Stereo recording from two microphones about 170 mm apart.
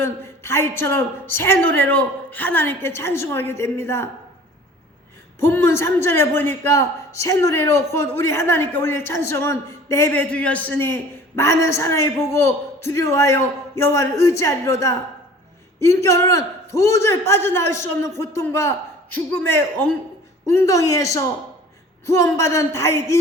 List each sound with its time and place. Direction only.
0.0 s a man's voice: 15° left (ahead or behind)
5.4 s a man's voice: 15° left (ahead or behind)